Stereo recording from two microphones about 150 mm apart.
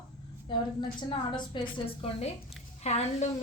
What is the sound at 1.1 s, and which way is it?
A woman's voice, 30° left (ahead or behind).